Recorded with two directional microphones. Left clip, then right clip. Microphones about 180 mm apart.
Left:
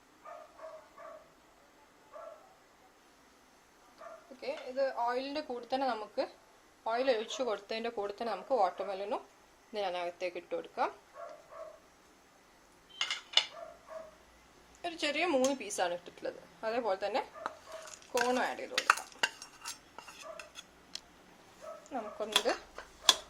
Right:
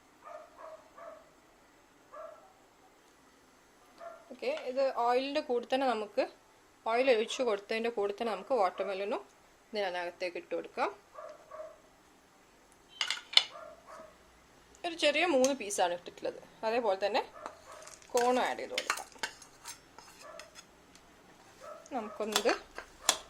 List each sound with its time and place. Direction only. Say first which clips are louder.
4.4 s a woman's voice: right 3 dB; 45° right (ahead or behind); by 9.2 s 20° right (ahead or behind)
9.7 s speech: right 1 dB; 10° right (ahead or behind)
14.8 s a woman's voice: right 5 dB; 20° right (ahead or behind)
18.8 s cutlery: left 6 dB; 15° right (ahead or behind)
21.8 s speech: right 2 dB; 25° right (ahead or behind)